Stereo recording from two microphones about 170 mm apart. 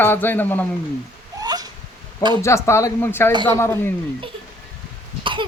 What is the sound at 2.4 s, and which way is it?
A man's voice, 15° left (ahead or behind).